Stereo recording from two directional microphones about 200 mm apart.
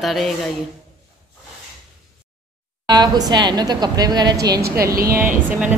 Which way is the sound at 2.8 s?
20° right (ahead or behind).